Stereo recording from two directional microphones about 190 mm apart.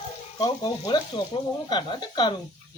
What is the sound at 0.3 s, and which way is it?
Speech, 25° left (ahead or behind).